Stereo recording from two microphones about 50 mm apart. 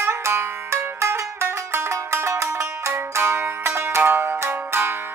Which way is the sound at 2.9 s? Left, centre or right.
Right.